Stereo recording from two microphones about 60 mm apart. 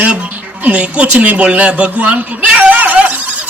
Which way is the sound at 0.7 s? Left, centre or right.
Centre.